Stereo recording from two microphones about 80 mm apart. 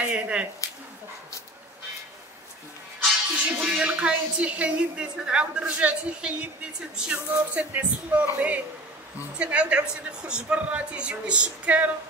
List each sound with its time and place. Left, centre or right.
0.0 s speech: centre
3.4 s a woman's voice: centre